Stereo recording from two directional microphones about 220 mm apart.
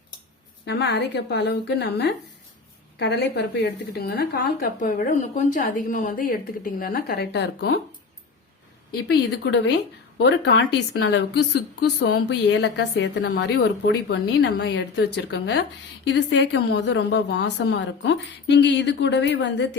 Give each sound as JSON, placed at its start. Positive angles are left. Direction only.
{"t": 0.6, "sound": "a woman's voice", "side_deg": 50}
{"t": 9.0, "sound": "a woman's voice", "side_deg": 50}